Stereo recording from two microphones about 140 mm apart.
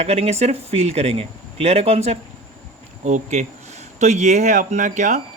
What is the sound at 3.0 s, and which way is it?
Speech, 55° right (ahead or behind).